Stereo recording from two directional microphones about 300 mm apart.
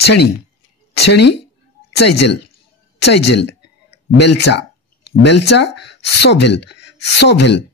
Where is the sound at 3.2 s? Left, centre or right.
Left.